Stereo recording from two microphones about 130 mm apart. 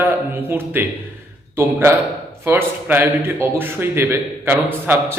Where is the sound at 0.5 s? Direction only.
15° right (ahead or behind).